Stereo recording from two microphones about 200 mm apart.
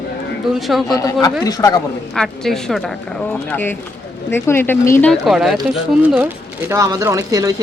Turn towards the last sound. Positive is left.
turn(degrees=-15)  # may be behind; listen again after turning